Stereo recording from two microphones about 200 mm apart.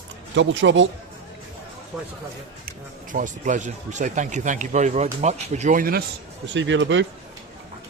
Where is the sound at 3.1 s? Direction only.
40° right (ahead or behind).